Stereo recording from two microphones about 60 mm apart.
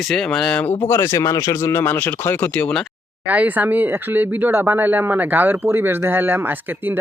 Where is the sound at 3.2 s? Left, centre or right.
Right.